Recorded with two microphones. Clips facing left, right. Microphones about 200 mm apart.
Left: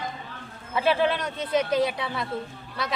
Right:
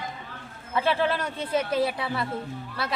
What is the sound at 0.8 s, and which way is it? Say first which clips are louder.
Speech: left 2 dB; centre (ahead or behind).